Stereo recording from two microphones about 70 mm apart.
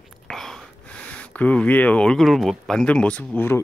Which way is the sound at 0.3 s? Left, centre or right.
Centre.